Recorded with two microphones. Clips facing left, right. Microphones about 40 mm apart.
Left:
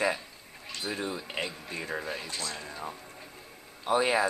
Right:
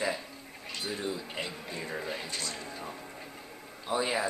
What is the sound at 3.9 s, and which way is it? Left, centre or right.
Speech, left.